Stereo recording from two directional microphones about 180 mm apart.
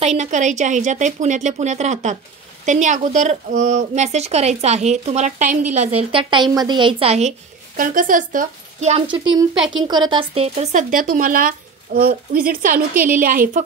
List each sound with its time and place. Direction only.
0.0 s speech: 40° right (ahead or behind)
5.8 s speech: 30° right (ahead or behind)
9.1 s a woman's voice: 25° right (ahead or behind); by 13.6 s 50° right (ahead or behind)